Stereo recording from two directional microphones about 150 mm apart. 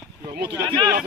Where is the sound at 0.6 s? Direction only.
30° right (ahead or behind).